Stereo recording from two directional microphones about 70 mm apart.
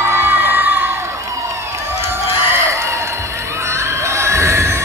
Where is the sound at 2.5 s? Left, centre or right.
Right.